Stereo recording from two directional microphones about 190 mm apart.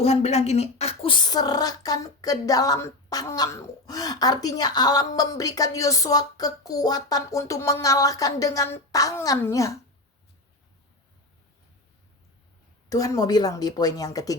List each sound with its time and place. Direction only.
0.0 s speech: 35° left (ahead or behind)
1.3 s speech: 20° left (ahead or behind)
12.9 s speech: 20° left (ahead or behind)